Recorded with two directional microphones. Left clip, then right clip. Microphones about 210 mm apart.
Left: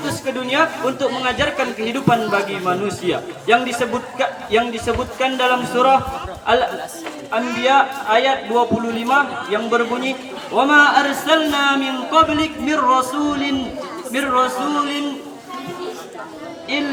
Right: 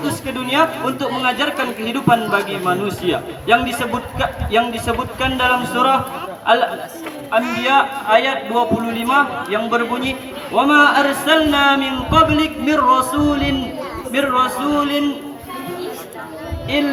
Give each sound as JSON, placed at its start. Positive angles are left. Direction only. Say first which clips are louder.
{"t": 0.3, "sound": "a man's voice", "louder": "right 1 dB", "side_deg": -25}